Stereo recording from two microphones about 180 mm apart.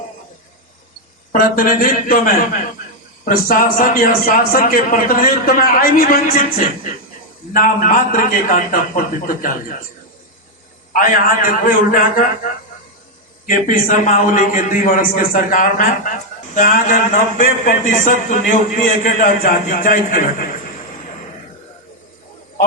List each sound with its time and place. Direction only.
1.3 s a man's voice: 50° left (ahead or behind)
11.1 s a man's voice: 50° left (ahead or behind)
13.5 s a man's voice: 50° left (ahead or behind)